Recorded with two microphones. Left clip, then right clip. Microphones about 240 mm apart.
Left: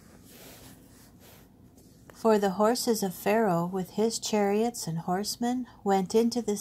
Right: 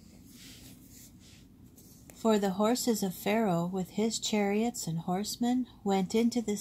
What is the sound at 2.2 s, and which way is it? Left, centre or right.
Speech, left.